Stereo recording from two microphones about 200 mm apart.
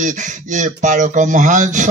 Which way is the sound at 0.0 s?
40° right (ahead or behind).